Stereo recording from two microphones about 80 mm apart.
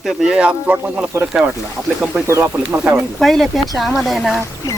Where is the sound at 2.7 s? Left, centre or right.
Right.